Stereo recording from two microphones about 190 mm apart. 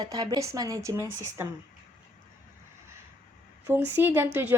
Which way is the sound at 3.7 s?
10° right (ahead or behind).